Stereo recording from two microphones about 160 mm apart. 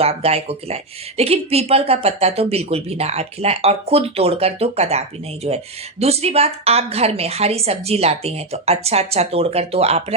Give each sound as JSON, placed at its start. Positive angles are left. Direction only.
{"t": 0.0, "sound": "speech", "side_deg": -40}